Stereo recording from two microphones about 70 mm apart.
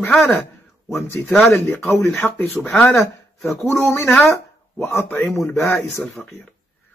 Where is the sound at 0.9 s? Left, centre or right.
Left.